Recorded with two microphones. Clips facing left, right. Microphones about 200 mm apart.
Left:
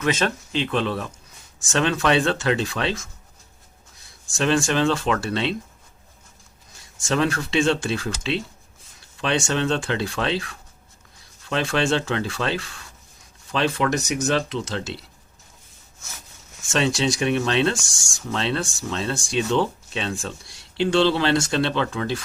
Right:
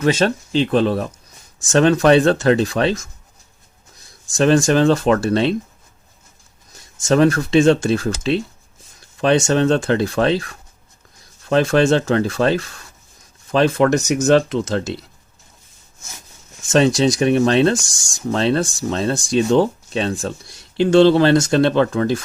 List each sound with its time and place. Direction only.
0.0 s speech: 35° right (ahead or behind)
4.3 s speech: 40° right (ahead or behind)
6.7 s speech: 45° right (ahead or behind)
16.6 s speech: 40° right (ahead or behind)